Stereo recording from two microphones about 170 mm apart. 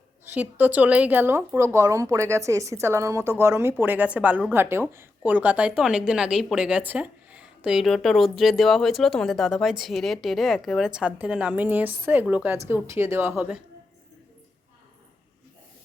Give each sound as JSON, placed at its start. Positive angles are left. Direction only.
{"t": 0.3, "sound": "speech", "side_deg": -10}